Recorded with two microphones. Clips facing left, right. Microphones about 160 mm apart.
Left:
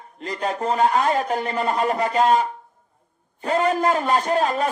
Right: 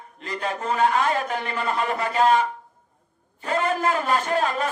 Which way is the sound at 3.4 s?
35° left (ahead or behind).